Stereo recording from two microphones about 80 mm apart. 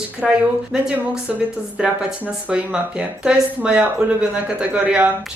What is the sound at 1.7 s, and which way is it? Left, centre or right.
Speech, centre.